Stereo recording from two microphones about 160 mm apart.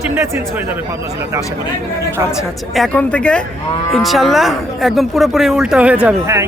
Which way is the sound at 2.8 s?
5° left (ahead or behind).